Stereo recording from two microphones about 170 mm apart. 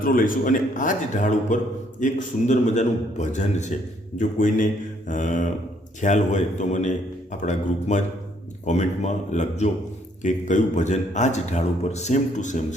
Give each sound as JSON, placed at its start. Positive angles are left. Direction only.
{"t": 0.0, "sound": "a man's voice", "side_deg": 55}